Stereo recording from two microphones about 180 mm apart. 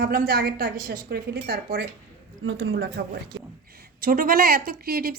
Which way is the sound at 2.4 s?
90° right.